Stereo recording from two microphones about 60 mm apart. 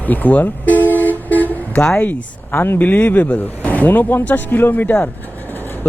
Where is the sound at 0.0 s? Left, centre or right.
Left.